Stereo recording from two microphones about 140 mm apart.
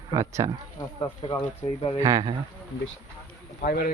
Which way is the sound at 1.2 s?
35° left (ahead or behind).